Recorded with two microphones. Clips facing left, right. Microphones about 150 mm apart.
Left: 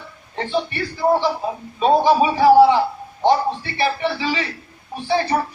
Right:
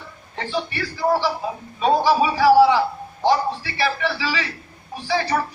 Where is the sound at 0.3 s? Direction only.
20° left (ahead or behind).